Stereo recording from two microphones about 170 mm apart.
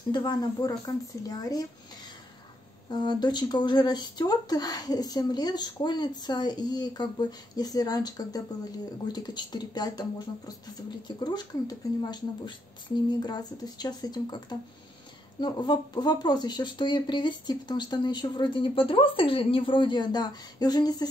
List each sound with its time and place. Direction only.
0.1 s speech: 25° left (ahead or behind)
2.9 s speech: 25° left (ahead or behind)